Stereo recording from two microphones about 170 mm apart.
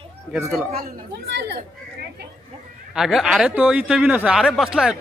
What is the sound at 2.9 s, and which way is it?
Speech, centre (ahead or behind).